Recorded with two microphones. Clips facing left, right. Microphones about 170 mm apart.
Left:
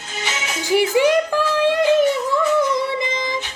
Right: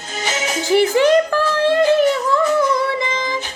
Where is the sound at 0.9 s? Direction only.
15° left (ahead or behind).